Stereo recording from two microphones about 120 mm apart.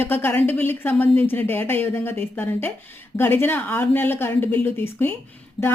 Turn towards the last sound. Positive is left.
turn(degrees=45)  # may be behind; listen again after turning